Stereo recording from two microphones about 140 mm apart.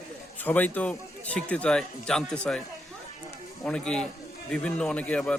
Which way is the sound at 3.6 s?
5° left (ahead or behind).